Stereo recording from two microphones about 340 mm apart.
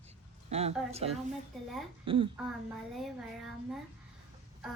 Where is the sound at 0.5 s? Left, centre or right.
Centre.